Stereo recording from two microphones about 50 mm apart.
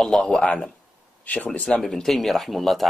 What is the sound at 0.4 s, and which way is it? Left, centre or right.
Speech, left.